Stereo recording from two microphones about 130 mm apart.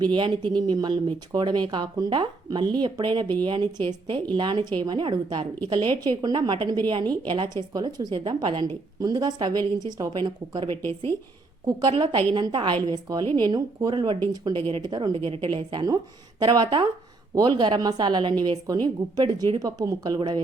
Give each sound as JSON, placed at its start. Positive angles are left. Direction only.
{"t": 0.0, "sound": "a woman's voice", "side_deg": -35}
{"t": 11.8, "sound": "a woman's voice", "side_deg": -35}